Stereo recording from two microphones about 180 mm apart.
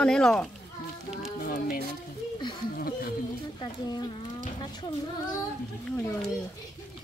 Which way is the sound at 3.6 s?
25° left (ahead or behind).